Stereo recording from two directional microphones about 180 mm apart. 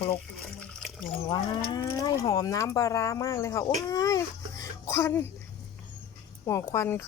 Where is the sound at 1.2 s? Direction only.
20° left (ahead or behind).